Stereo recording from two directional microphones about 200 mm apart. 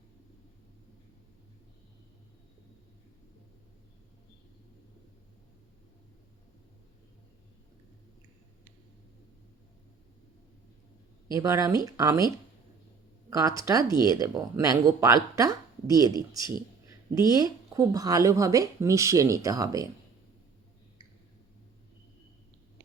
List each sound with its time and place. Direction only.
11.3 s speech: 15° right (ahead or behind)
13.3 s speech: 15° right (ahead or behind)